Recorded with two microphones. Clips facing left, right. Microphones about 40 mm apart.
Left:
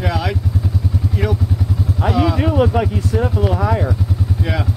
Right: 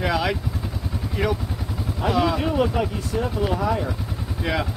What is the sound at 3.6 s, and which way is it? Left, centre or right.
Speech, left.